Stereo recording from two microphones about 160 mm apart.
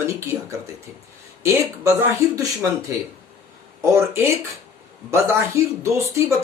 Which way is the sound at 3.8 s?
15° right (ahead or behind).